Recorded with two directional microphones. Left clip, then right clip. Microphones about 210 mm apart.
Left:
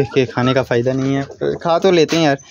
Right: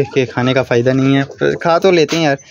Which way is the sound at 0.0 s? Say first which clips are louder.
Right 1 dB; centre (ahead or behind).